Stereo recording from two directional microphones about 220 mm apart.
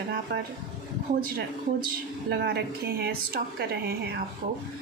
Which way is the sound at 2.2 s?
45° right (ahead or behind).